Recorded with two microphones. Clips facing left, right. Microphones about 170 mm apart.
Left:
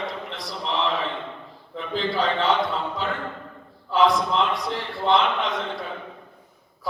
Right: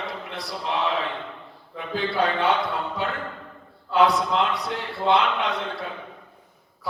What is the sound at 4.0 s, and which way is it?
A man's voice, 65° right (ahead or behind).